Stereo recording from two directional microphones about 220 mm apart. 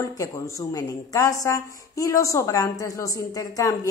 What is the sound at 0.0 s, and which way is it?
Speech, 15° left (ahead or behind).